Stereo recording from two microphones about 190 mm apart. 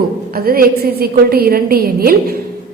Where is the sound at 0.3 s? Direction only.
50° right (ahead or behind).